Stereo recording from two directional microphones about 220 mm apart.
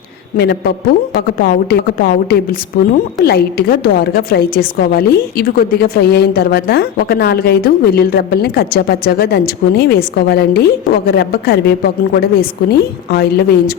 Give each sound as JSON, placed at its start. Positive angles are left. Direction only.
{"t": 0.3, "sound": "a woman's voice", "side_deg": 45}